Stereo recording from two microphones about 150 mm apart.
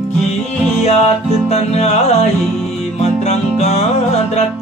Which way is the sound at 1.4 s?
45° left (ahead or behind).